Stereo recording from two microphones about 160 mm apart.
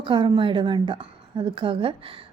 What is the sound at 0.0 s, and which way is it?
A woman's voice, 30° right (ahead or behind).